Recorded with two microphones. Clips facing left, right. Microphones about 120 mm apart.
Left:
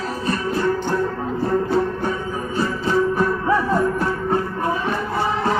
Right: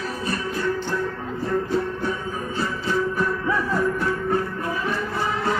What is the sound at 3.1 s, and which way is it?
Music, 40° left (ahead or behind).